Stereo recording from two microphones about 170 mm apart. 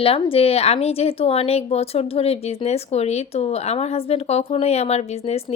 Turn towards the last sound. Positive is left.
turn(degrees=40)  # may be behind; listen again after turning